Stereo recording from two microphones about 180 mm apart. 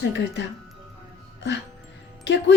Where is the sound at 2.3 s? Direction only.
85° left.